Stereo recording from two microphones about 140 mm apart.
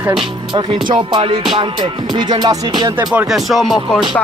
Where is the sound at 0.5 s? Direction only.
35° right (ahead or behind).